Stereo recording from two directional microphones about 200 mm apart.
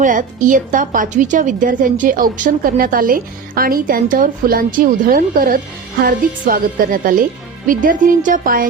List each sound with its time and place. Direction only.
0.0 s a woman's voice: 40° right (ahead or behind)